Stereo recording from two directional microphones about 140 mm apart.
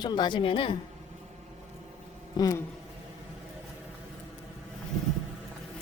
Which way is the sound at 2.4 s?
25° left (ahead or behind).